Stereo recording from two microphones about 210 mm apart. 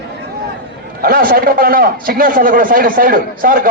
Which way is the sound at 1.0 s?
45° right (ahead or behind).